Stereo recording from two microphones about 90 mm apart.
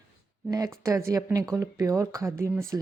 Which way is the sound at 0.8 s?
35° right (ahead or behind).